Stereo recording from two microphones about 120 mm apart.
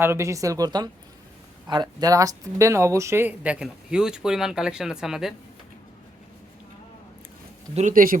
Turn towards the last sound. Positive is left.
turn(degrees=-70)  # may be behind; listen again after turning